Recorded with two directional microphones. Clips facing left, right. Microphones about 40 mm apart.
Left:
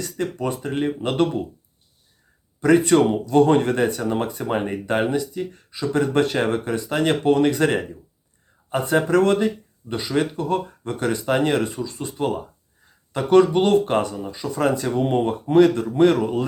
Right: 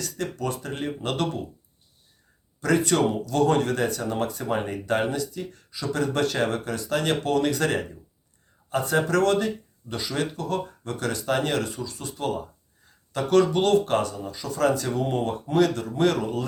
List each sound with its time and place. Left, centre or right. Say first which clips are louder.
0.0 s speech: left 4 dB; left
2.6 s speech: left 6 dB; left